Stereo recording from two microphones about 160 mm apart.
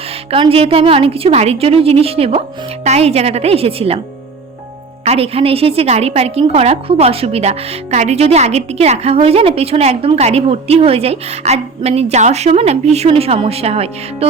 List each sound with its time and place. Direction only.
0.3 s a woman's voice: 35° right (ahead or behind)
5.0 s a woman's voice: 40° right (ahead or behind)